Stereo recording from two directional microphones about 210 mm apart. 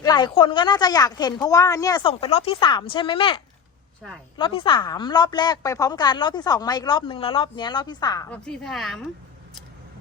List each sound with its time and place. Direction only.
0.0 s a woman's voice: 20° left (ahead or behind)
8.3 s a woman's voice: 5° left (ahead or behind)